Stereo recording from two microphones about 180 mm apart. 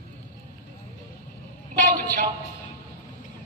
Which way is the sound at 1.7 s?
50° right (ahead or behind).